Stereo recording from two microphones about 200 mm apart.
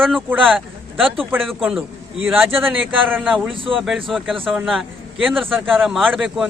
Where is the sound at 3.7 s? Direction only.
Centre (ahead or behind).